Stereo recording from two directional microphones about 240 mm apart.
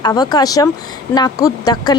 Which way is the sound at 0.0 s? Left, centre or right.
Centre.